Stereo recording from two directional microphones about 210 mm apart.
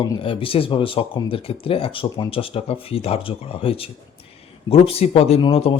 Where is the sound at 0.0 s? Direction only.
25° left (ahead or behind).